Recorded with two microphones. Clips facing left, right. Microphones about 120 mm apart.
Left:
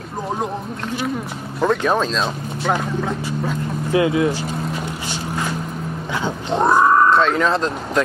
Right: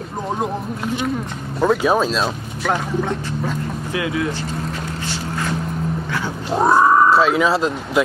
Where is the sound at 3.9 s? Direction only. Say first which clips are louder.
Left 6 dB; 25° left (ahead or behind).